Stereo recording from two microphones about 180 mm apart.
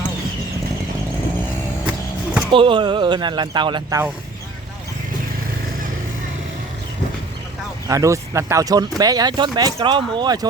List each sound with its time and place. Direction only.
2.5 s speech: 30° right (ahead or behind)
7.9 s speech: 15° right (ahead or behind)